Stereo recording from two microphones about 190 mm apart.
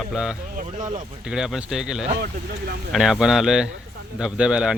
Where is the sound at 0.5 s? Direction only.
40° right (ahead or behind).